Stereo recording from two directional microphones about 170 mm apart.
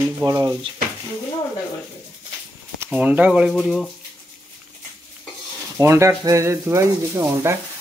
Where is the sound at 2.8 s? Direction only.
10° right (ahead or behind).